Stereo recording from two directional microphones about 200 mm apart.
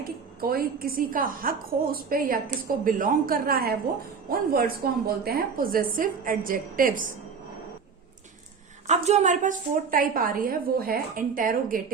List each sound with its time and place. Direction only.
0.4 s a woman's voice: 45° right (ahead or behind)
8.9 s a woman's voice: 35° right (ahead or behind)